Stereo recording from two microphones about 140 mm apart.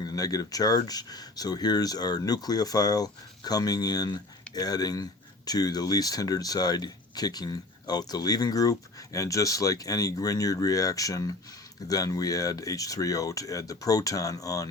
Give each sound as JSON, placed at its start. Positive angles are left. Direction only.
{"t": 0.0, "sound": "speech", "side_deg": 25}